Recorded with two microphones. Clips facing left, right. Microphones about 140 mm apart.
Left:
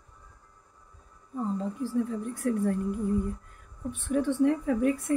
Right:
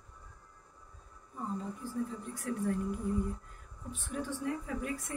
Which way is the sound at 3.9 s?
60° left (ahead or behind).